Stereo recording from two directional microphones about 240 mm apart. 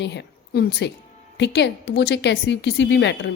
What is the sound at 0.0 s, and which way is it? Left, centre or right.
A woman's voice, left.